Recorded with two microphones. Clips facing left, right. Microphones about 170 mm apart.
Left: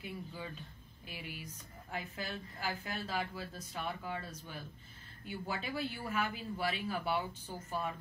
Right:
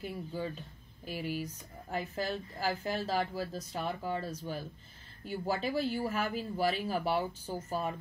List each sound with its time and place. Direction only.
0.0 s speech: 40° right (ahead or behind)